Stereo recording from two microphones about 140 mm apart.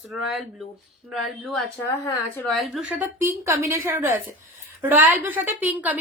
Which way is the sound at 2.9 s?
15° right (ahead or behind).